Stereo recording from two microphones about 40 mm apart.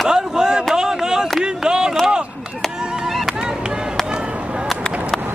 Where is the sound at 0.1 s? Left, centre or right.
Centre.